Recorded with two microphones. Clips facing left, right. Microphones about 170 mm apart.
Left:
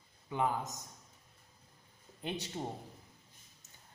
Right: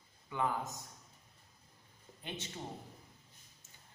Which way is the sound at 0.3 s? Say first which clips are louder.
Left 2 dB; 20° left (ahead or behind).